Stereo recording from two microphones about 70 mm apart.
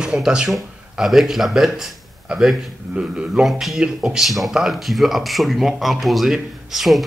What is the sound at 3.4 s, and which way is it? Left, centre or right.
Speech, centre.